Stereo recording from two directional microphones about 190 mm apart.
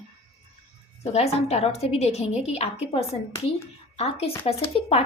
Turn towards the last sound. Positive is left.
turn(degrees=30)  # may be behind; listen again after turning